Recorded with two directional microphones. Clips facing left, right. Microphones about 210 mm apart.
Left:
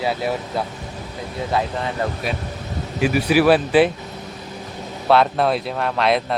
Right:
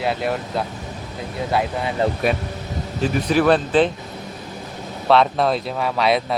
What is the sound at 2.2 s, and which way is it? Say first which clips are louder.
Speech: right 5 dB; 55° right (ahead or behind).